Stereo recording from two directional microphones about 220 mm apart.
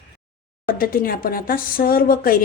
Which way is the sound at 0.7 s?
40° left (ahead or behind).